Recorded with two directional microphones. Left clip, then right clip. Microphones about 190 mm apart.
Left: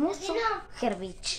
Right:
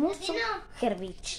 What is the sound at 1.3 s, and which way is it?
Speech, 10° left (ahead or behind).